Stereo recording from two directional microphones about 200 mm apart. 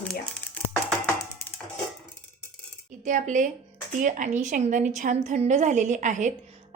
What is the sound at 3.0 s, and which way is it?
A woman's voice, 40° right (ahead or behind).